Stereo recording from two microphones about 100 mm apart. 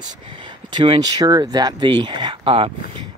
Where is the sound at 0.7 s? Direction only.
50° right (ahead or behind); by 3.0 s 65° right (ahead or behind).